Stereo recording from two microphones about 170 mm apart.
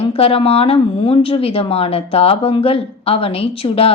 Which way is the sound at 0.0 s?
35° left (ahead or behind).